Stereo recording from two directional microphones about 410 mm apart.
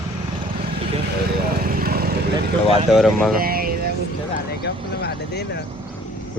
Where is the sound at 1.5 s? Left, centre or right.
Right.